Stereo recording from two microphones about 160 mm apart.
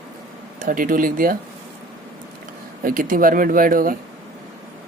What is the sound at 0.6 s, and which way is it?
Speech, 55° right (ahead or behind).